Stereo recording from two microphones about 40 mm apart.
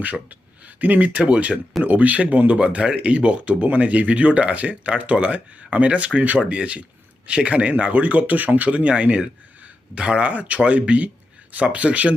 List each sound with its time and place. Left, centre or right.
0.0 s speech: right
9.6 s a sound: right
10.0 s speech: right
10.2 s speech: right